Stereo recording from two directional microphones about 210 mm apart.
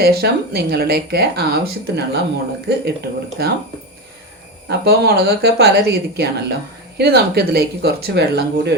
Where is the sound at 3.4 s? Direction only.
50° right (ahead or behind).